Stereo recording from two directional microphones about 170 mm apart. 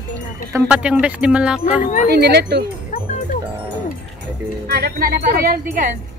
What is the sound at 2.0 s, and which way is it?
Speech, 70° right (ahead or behind).